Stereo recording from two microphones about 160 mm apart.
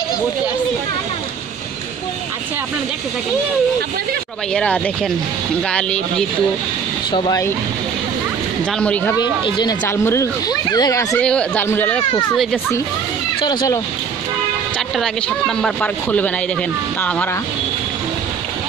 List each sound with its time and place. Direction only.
4.6 s speech: 5° left (ahead or behind)
7.1 s speech: 25° left (ahead or behind)
8.7 s speech: 10° left (ahead or behind)
9.2 s speech: 25° left (ahead or behind)
11.1 s speech: 5° left (ahead or behind)
12.1 s speech: 25° left (ahead or behind)
13.4 s speech: 25° left (ahead or behind)
15.0 s speech: 5° left (ahead or behind)